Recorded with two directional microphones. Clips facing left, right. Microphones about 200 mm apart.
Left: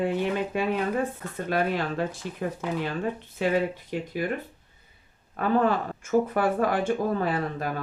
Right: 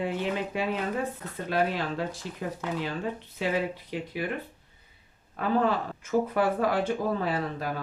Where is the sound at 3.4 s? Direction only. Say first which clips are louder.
Left 4 dB; 55° left (ahead or behind).